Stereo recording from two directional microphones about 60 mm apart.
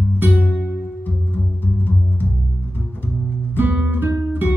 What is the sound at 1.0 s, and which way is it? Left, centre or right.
Music, left.